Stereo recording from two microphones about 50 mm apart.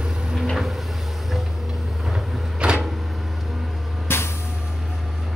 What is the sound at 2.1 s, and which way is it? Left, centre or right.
Vehicle, centre.